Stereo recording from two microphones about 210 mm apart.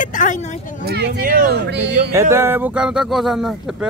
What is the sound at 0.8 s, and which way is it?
Speech, 50° right (ahead or behind).